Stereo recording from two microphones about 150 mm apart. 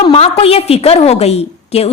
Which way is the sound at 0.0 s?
40° left (ahead or behind).